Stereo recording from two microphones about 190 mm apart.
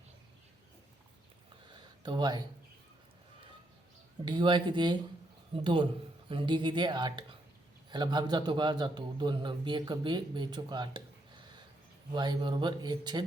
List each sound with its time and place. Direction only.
1.7 s a sound: 25° right (ahead or behind)
4.3 s a man's voice: 25° right (ahead or behind)
12.1 s a man's voice: 25° right (ahead or behind)